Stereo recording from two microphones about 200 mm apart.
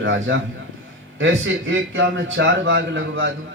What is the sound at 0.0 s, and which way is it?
A man's voice, 70° right (ahead or behind).